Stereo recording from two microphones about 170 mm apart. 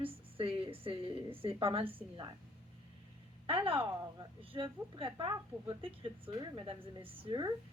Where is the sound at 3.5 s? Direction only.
30° right (ahead or behind).